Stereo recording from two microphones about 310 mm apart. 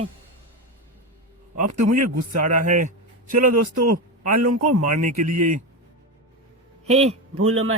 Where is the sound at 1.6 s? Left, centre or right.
Right.